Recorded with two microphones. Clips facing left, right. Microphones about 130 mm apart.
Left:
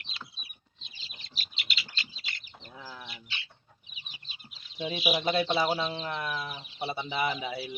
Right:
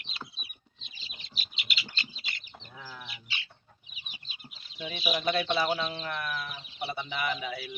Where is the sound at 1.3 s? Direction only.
Centre (ahead or behind).